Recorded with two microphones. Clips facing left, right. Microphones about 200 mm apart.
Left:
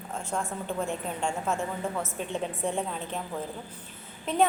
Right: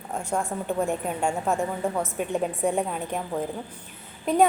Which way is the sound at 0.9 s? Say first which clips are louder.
Right 5 dB; 55° right (ahead or behind).